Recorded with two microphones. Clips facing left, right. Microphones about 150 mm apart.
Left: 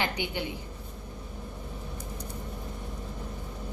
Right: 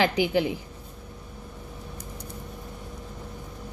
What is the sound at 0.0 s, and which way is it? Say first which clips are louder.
Speech: right 9 dB; 90° right.